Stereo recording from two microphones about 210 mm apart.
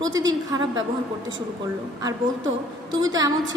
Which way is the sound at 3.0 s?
20° right (ahead or behind).